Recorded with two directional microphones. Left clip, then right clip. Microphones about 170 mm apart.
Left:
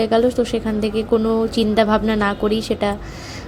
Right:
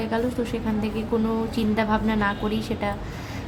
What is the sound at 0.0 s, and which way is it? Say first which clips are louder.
A woman's voice: left 10 dB; 35° left (ahead or behind).